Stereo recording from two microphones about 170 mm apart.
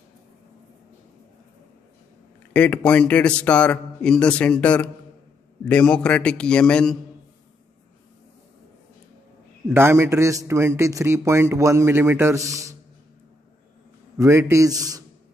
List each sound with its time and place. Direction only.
2.5 s a man's voice: 10° left (ahead or behind)
9.8 s a man's voice: 15° right (ahead or behind)
14.1 s a man's voice: 15° right (ahead or behind)